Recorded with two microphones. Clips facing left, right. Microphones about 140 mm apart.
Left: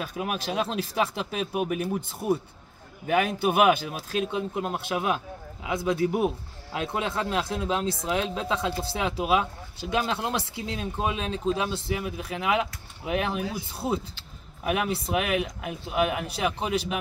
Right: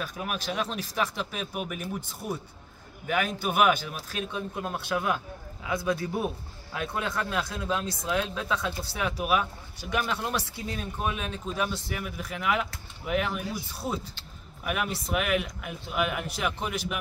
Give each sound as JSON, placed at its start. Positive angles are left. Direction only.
{"t": 0.2, "sound": "a man's voice", "side_deg": 25}